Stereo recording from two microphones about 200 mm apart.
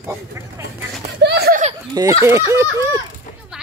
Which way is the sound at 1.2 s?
50° right (ahead or behind).